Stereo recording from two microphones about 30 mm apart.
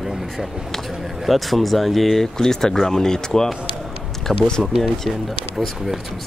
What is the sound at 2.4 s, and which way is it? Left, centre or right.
Speech, centre.